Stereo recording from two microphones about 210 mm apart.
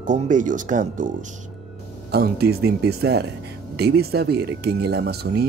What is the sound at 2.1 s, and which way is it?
Speech, 50° right (ahead or behind).